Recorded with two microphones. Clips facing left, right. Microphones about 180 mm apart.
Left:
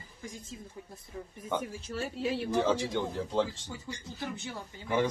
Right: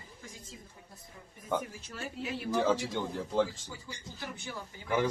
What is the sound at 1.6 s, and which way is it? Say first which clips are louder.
Speech: left 5 dB; 30° left (ahead or behind).